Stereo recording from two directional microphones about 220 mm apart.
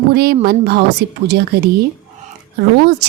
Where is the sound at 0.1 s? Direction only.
45° right (ahead or behind).